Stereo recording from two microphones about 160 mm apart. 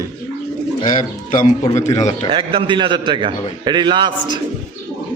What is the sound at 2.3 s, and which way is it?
A man's voice, 35° right (ahead or behind).